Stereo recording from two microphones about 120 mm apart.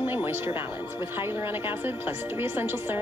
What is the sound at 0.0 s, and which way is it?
A woman's voice, 15° right (ahead or behind).